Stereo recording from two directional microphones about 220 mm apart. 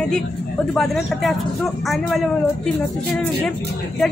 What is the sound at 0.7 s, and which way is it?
Speech, centre (ahead or behind).